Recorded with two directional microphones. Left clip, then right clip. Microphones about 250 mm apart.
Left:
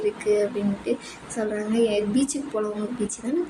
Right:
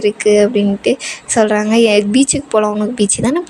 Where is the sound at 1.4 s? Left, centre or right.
Right.